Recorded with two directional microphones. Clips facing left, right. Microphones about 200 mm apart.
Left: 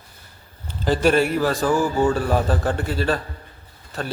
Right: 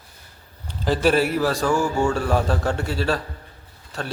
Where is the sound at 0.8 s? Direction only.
Centre (ahead or behind).